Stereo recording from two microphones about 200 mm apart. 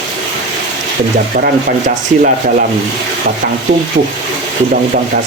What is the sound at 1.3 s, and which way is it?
Rub, 45° right (ahead or behind).